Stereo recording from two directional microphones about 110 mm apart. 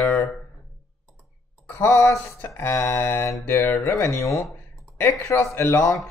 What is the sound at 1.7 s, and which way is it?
Speech, 25° left (ahead or behind).